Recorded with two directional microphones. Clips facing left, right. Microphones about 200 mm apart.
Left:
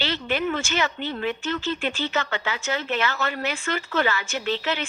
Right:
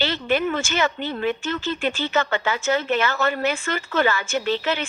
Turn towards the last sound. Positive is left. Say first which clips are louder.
# right 3 dB
turn(degrees=-50)  # may be behind; listen again after turning